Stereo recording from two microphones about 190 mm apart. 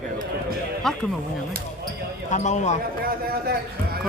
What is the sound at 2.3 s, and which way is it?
Speech, 40° left (ahead or behind).